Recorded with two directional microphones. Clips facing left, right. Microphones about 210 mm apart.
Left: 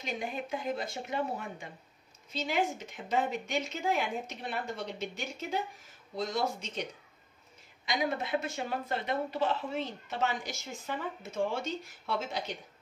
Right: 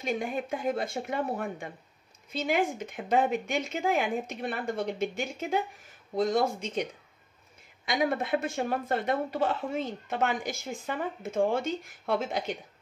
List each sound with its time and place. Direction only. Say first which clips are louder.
0.0 s speech: right 6 dB; 50° right (ahead or behind)
7.8 s speech: right 4 dB; 55° right (ahead or behind)